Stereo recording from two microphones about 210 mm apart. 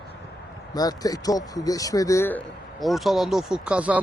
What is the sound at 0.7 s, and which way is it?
Speech, 15° left (ahead or behind).